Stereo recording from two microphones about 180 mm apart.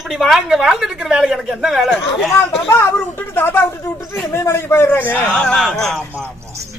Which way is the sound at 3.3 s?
10° left (ahead or behind).